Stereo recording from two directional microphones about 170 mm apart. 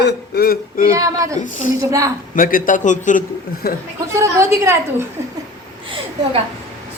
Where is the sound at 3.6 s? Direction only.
60° left (ahead or behind).